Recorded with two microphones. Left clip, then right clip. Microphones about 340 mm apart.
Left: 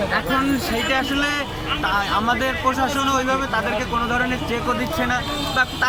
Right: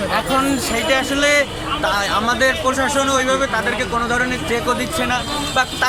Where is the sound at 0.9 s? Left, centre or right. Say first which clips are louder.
Right 7 dB; centre.